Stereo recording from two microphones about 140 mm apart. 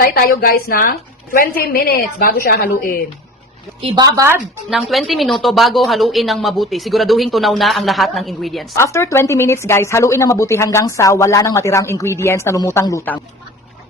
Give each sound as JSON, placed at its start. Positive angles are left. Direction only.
{"t": 0.0, "sound": "a woman's voice", "side_deg": 90}
{"t": 3.8, "sound": "a woman's voice", "side_deg": -40}
{"t": 4.0, "sound": "speech", "side_deg": -20}
{"t": 4.7, "sound": "a woman's voice", "side_deg": 0}
{"t": 8.7, "sound": "a woman's voice", "side_deg": 20}